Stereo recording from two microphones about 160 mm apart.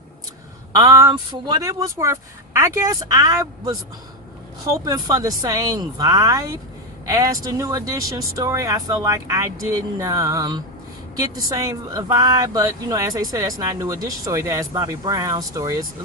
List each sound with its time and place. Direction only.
0.8 s speech: 20° right (ahead or behind)